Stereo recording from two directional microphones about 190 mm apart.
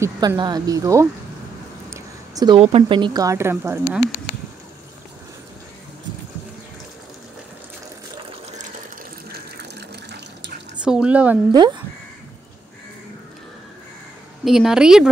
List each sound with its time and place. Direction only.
0.0 s a woman's voice: 20° right (ahead or behind)
9.3 s water: 60° right (ahead or behind)
10.8 s speech: 5° right (ahead or behind)
11.5 s speech: 25° right (ahead or behind)
14.4 s speech: centre (ahead or behind)